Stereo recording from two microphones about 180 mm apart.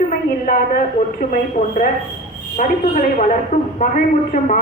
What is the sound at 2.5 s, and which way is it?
A woman's voice, 45° left (ahead or behind).